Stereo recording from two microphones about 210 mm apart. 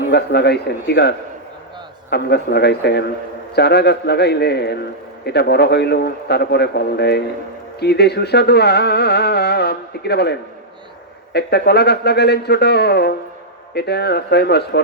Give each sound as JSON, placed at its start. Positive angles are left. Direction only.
{"t": 0.1, "sound": "speech", "side_deg": 50}
{"t": 11.3, "sound": "speech", "side_deg": 50}